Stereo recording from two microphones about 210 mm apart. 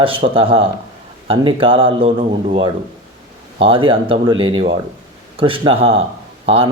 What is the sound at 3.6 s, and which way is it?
Speech, 25° right (ahead or behind).